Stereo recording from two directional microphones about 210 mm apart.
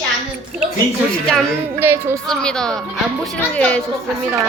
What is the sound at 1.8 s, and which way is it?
Child singing, 10° right (ahead or behind).